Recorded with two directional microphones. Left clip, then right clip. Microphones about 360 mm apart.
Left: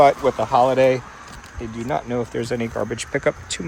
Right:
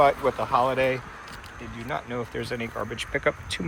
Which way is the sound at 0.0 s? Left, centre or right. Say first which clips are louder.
Left 6 dB; centre.